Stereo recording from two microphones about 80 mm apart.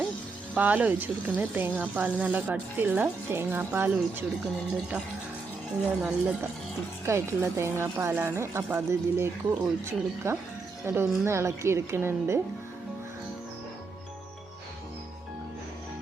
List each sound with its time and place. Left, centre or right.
0.5 s speech: centre
6.0 s speech: centre
7.0 s a woman's voice: right